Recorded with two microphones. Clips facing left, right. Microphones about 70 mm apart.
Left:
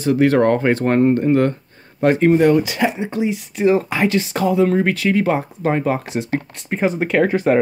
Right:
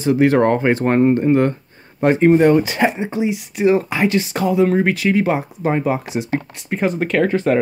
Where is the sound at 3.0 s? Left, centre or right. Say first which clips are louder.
Right 1 dB; centre.